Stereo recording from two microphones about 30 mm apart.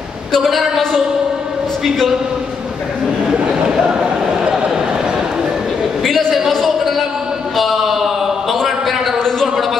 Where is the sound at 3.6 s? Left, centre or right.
Right.